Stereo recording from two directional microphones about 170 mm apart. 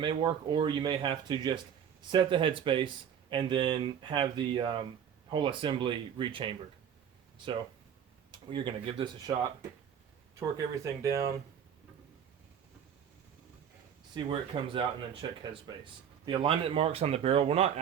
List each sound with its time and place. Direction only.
0.0 s speech: 30° right (ahead or behind)
8.3 s speech: 30° right (ahead or behind)
14.3 s speech: 30° right (ahead or behind)